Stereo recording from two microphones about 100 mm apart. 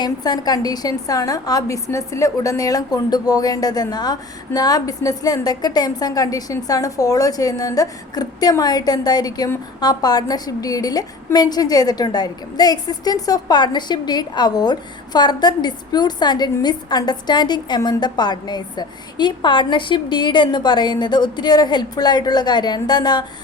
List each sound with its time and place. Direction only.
0.0 s a woman's voice: 45° left (ahead or behind)